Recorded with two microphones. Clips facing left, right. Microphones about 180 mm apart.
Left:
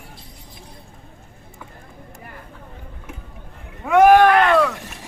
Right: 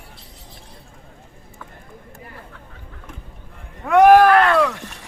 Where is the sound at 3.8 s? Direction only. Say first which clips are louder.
Right 1 dB; centre (ahead or behind).